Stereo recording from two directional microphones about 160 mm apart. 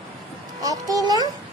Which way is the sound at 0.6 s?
20° right (ahead or behind).